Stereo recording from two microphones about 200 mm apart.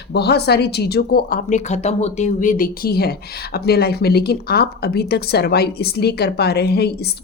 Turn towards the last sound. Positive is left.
turn(degrees=55)  # may be behind; listen again after turning